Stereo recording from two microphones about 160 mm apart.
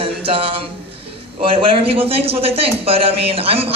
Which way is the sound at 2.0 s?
35° right (ahead or behind).